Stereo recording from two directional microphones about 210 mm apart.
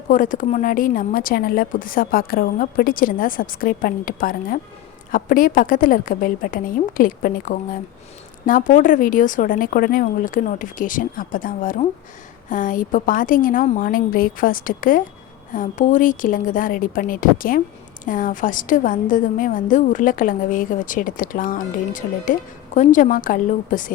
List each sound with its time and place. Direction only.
0.1 s a woman's voice: 40° left (ahead or behind)